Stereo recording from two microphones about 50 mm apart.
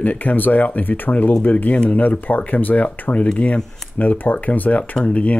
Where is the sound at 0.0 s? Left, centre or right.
Left.